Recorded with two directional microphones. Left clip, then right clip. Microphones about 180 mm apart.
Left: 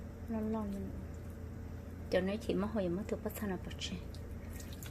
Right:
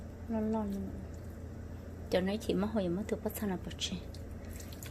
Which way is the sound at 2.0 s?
15° right (ahead or behind).